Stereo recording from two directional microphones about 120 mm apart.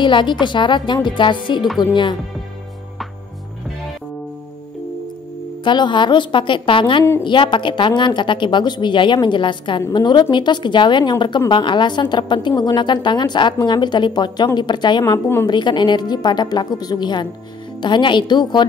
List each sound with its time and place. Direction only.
0.0 s a woman's voice: 40° left (ahead or behind)
5.6 s a woman's voice: 40° left (ahead or behind)